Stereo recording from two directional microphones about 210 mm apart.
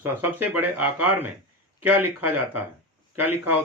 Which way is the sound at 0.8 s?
10° right (ahead or behind).